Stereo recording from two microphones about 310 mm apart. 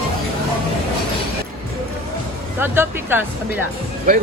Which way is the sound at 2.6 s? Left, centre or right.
Centre.